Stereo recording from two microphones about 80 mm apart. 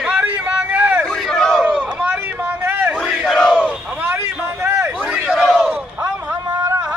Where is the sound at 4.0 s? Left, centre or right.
Right.